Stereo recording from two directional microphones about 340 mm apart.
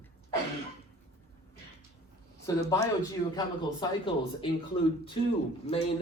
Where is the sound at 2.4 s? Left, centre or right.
Centre.